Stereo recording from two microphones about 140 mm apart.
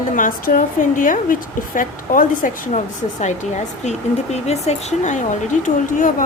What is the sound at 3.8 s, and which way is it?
Speech, 55° left (ahead or behind).